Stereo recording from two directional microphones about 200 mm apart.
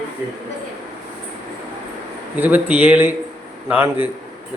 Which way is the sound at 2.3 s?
10° right (ahead or behind).